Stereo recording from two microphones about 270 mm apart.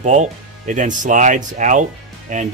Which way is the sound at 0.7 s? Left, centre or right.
Right.